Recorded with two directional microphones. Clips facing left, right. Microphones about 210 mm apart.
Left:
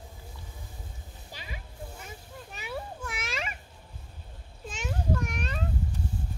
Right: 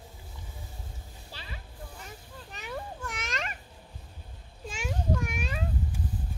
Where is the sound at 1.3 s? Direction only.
10° left (ahead or behind).